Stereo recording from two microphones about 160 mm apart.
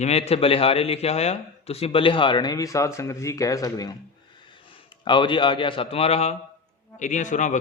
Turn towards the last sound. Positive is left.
turn(degrees=50)  # may be behind; listen again after turning